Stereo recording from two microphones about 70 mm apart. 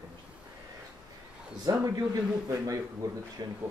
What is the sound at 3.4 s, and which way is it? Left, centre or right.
Speech, right.